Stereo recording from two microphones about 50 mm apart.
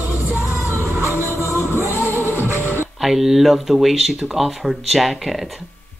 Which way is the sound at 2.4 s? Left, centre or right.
Right.